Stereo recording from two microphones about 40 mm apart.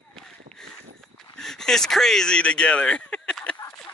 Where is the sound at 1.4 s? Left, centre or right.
Centre.